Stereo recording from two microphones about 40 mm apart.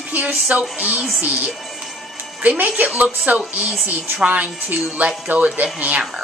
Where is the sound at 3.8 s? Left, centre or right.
Right.